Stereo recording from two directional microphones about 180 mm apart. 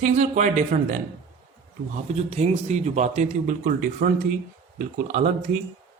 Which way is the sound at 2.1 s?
35° right (ahead or behind).